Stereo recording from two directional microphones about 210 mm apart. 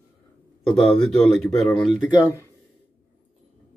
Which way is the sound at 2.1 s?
15° left (ahead or behind).